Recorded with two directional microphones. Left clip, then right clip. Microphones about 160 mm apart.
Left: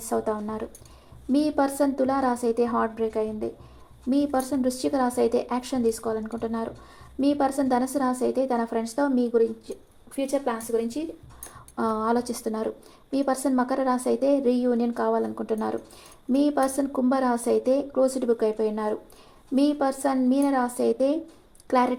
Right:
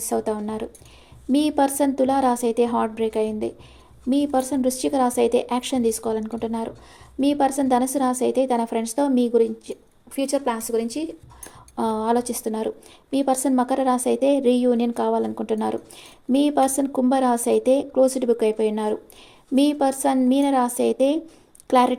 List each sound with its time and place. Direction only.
0.1 s a woman's voice: 25° right (ahead or behind); by 11.1 s 40° right (ahead or behind)
11.8 s a woman's voice: 25° right (ahead or behind)